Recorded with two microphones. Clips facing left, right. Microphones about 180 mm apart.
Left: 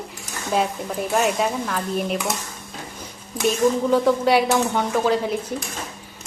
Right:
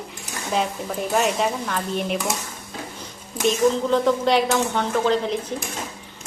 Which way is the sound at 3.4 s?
5° left (ahead or behind).